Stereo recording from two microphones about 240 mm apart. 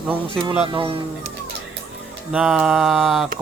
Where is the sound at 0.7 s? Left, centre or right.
Right.